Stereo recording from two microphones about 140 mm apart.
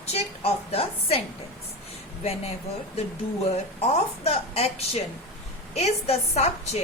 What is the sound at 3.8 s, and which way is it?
A woman's voice, 45° left (ahead or behind).